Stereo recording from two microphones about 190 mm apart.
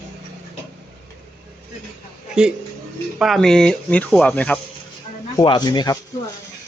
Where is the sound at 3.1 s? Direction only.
Centre (ahead or behind).